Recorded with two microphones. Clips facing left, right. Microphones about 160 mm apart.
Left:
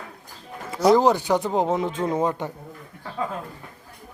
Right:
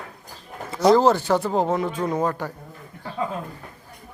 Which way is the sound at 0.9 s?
15° left (ahead or behind).